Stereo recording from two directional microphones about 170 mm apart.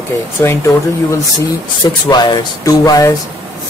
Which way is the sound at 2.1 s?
25° left (ahead or behind).